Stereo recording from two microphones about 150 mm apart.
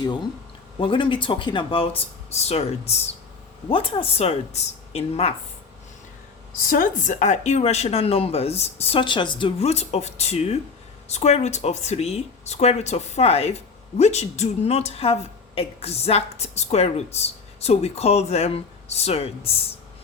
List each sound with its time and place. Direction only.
0.8 s speech: 35° left (ahead or behind)
6.7 s a woman's voice: 65° left (ahead or behind); by 19.6 s 40° left (ahead or behind)